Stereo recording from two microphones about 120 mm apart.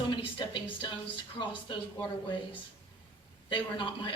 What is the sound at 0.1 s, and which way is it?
Speech, 45° left (ahead or behind).